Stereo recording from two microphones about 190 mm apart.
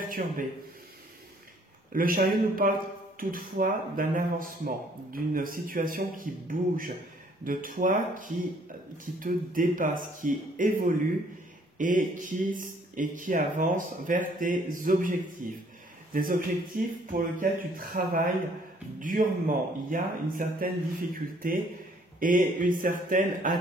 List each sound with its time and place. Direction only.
0.0 s speech: 45° right (ahead or behind)
1.9 s a man's voice: 50° right (ahead or behind)